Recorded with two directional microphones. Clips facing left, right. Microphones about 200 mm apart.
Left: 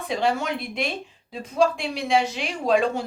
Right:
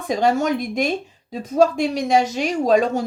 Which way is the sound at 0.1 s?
45° right (ahead or behind).